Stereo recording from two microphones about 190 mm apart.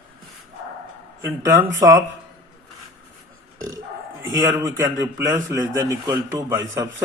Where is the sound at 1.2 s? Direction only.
15° right (ahead or behind).